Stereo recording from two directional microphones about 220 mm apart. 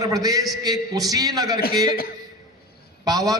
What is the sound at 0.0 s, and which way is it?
A man's voice, 15° right (ahead or behind).